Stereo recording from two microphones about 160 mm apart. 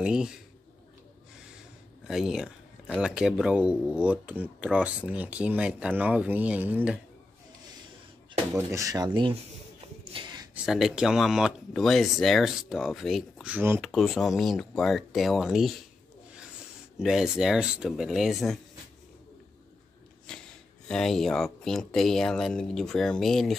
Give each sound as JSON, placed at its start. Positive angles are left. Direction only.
{"t": 0.0, "sound": "speech", "side_deg": -5}
{"t": 2.0, "sound": "speech", "side_deg": -5}
{"t": 8.5, "sound": "speech", "side_deg": -20}
{"t": 10.1, "sound": "a sound", "side_deg": -25}
{"t": 10.5, "sound": "speech", "side_deg": -5}
{"t": 17.0, "sound": "speech", "side_deg": -5}
{"t": 20.3, "sound": "a sound", "side_deg": 5}
{"t": 20.9, "sound": "speech", "side_deg": 0}